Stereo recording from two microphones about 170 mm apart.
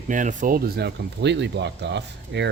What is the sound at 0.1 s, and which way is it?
Speech, 50° right (ahead or behind).